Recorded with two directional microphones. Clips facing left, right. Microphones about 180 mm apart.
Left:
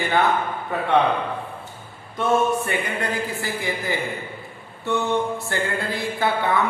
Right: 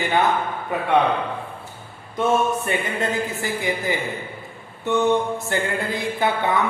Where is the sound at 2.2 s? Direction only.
20° right (ahead or behind).